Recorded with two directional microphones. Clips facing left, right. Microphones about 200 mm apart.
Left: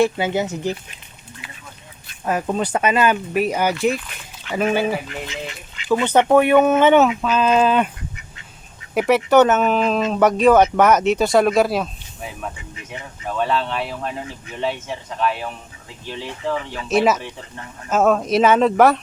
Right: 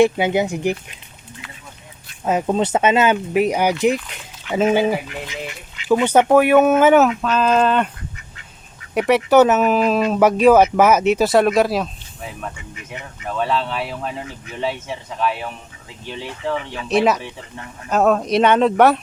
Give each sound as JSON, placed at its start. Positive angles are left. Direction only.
{"t": 0.0, "sound": "speech", "side_deg": -15}
{"t": 1.4, "sound": "a sound", "side_deg": 10}
{"t": 2.2, "sound": "speech", "side_deg": -20}
{"t": 7.1, "sound": "speech", "side_deg": 5}
{"t": 9.0, "sound": "speech", "side_deg": 0}